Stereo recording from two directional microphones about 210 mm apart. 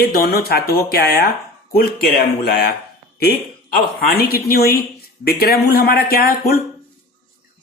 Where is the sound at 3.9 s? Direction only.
45° left (ahead or behind).